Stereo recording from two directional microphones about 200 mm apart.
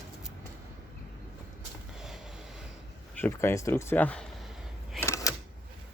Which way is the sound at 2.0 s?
Centre (ahead or behind).